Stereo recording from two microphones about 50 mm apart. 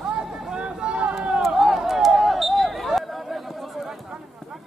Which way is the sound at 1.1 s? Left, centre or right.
Centre.